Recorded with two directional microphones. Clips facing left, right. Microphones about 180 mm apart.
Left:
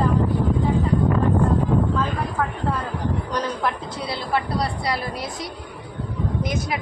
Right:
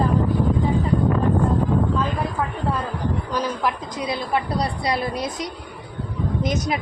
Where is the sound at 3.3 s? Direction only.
15° right (ahead or behind).